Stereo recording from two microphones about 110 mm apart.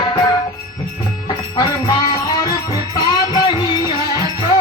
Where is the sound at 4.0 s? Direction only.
40° right (ahead or behind).